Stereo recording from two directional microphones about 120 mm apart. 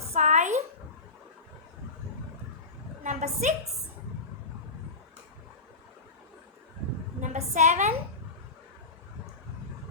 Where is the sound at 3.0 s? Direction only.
90° right.